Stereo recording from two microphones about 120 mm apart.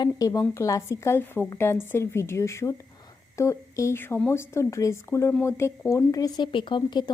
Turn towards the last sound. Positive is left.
turn(degrees=40)  # may be behind; listen again after turning